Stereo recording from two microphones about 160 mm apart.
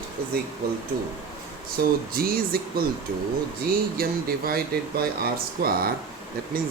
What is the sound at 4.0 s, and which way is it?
Speech, 70° right (ahead or behind).